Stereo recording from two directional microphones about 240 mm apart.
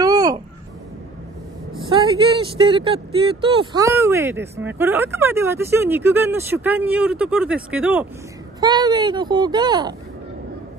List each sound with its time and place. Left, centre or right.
0.0 s a sound: centre
1.8 s speech: centre
8.5 s speech: centre